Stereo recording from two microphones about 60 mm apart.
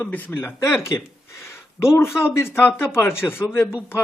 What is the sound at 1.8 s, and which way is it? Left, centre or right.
A man's voice, left.